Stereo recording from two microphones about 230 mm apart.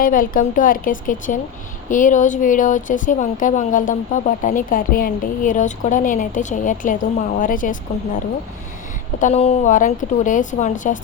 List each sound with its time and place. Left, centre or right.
0.0 s a woman's voice: left
9.1 s a woman's voice: left